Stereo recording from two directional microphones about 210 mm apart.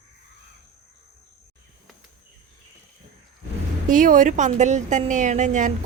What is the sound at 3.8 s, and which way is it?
A woman's voice, 40° right (ahead or behind).